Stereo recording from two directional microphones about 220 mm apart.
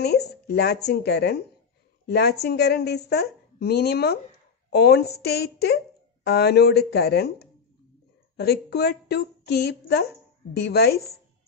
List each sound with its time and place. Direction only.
0.0 s a woman's voice: 45° left (ahead or behind)